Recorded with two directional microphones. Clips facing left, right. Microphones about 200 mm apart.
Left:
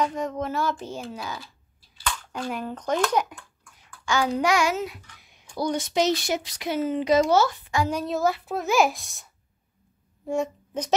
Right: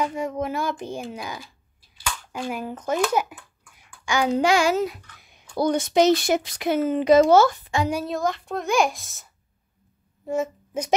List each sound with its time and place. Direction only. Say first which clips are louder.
0.0 s speech: right 1 dB; 10° right (ahead or behind)
2.0 s a sound: even; 10° right (ahead or behind)
4.3 s a child's voice: right 5 dB; 25° right (ahead or behind)
5.6 s a child's voice: right 5 dB; 50° right (ahead or behind)
7.9 s a child's voice: right 1 dB; 5° right (ahead or behind)
8.2 s a child's voice: left 1 dB; 5° left (ahead or behind)